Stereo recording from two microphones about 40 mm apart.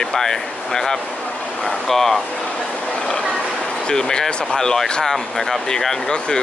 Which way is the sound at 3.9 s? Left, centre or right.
Centre.